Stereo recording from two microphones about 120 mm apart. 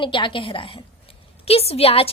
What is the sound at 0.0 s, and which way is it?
A woman's voice, 45° left (ahead or behind).